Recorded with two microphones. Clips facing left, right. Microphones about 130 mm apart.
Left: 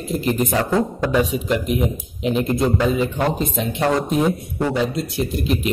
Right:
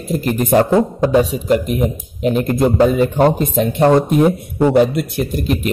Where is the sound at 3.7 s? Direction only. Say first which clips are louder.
Right 8 dB; 30° right (ahead or behind).